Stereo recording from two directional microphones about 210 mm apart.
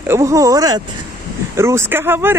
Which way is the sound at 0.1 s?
15° right (ahead or behind).